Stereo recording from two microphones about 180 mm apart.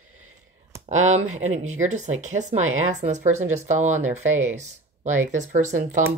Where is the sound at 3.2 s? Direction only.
15° right (ahead or behind).